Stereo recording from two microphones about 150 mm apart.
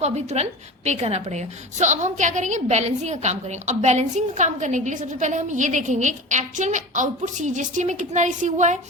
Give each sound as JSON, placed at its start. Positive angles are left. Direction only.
{"t": 0.0, "sound": "a woman's voice", "side_deg": -45}